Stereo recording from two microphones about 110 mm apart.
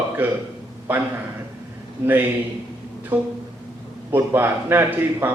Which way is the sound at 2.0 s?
20° right (ahead or behind).